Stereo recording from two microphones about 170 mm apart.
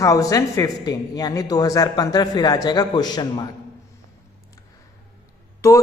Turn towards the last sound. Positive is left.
turn(degrees=15)  # may be behind; listen again after turning